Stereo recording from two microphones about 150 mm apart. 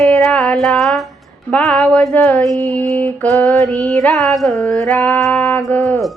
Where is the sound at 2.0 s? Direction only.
10° left (ahead or behind).